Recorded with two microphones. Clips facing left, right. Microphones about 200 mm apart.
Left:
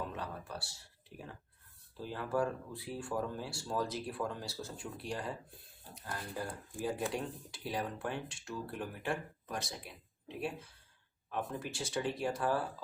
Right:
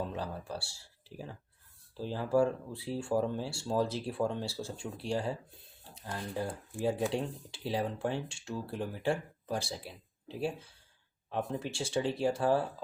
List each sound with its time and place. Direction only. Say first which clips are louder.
0.2 s speech: right 4 dB; 30° right (ahead or behind)